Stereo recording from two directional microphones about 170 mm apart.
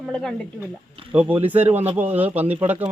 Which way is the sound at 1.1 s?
10° right (ahead or behind).